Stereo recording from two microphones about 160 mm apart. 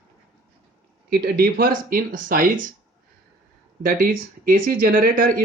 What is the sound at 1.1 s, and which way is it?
Speech, 75° right (ahead or behind).